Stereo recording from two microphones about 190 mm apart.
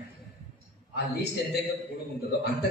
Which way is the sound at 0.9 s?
60° left (ahead or behind).